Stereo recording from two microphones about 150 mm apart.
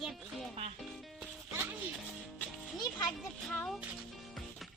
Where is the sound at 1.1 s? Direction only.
10° right (ahead or behind).